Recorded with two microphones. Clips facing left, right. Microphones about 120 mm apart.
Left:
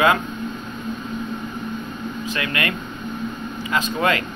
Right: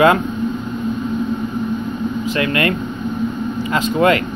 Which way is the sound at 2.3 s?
35° right (ahead or behind).